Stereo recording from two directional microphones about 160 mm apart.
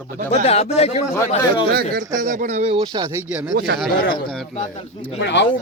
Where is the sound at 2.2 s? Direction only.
55° right (ahead or behind); by 3.1 s 30° right (ahead or behind).